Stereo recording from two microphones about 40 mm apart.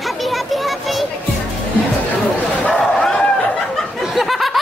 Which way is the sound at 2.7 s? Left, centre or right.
Centre.